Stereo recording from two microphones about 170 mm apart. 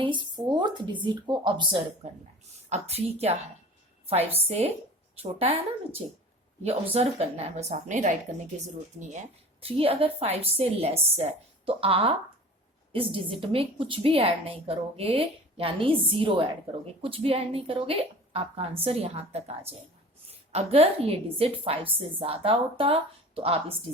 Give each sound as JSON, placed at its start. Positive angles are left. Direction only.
{"t": 0.0, "sound": "a sound", "side_deg": -25}
{"t": 1.0, "sound": "speech", "side_deg": -25}
{"t": 2.6, "sound": "a woman's voice", "side_deg": -40}